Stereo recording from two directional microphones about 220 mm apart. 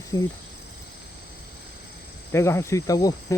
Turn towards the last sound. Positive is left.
turn(degrees=15)  # may be behind; listen again after turning